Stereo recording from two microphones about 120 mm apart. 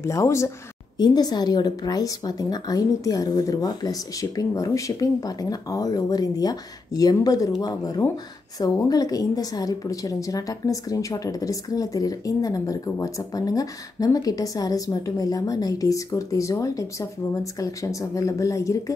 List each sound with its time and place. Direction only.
0.0 s a woman's voice: 25° left (ahead or behind)
0.9 s a woman's voice: 35° left (ahead or behind)